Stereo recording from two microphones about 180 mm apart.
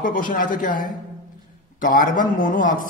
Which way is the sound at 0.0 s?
50° left (ahead or behind).